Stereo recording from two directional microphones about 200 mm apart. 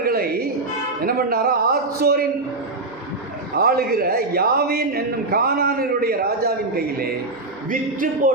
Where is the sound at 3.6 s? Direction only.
50° right (ahead or behind).